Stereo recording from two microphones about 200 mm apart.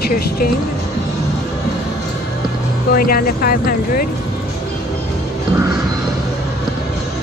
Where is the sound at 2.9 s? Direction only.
45° left (ahead or behind).